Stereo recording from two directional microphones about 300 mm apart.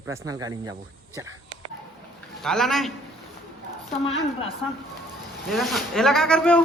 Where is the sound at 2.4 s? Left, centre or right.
Centre.